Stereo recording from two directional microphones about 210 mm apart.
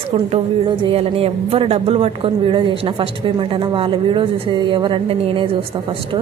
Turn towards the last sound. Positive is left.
turn(degrees=-25)  # may be behind; listen again after turning